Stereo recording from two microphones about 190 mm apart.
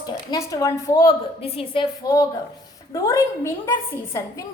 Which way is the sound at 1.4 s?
30° left (ahead or behind).